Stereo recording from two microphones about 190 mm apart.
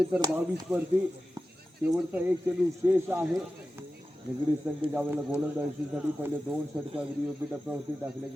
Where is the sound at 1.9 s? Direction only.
10° right (ahead or behind).